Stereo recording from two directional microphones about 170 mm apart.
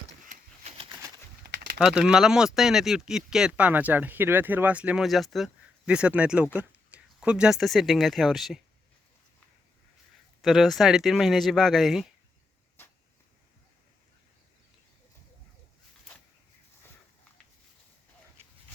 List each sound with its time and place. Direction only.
1.5 s a sound: 70° right (ahead or behind)
1.8 s speech: 5° right (ahead or behind)
10.4 s speech: centre (ahead or behind)